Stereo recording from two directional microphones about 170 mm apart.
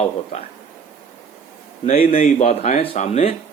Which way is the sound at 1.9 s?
55° left (ahead or behind).